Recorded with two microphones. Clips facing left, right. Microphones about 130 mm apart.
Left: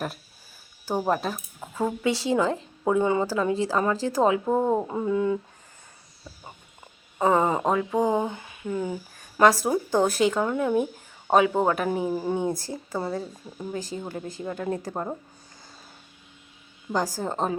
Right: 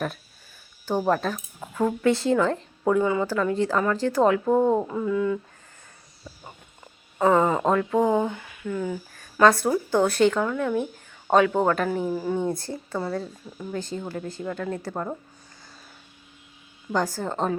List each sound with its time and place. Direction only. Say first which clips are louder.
0.9 s speech: right 2 dB; 10° left (ahead or behind)
3.0 s speech: left 3 dB; 25° left (ahead or behind)
3.2 s speech: right 1 dB; 15° left (ahead or behind)
4.9 s speech: even; 25° left (ahead or behind)
7.2 s speech: right 2 dB; 20° left (ahead or behind)
9.4 s speech: right 1 dB; 15° left (ahead or behind)
16.9 s speech: right 1 dB; 15° left (ahead or behind)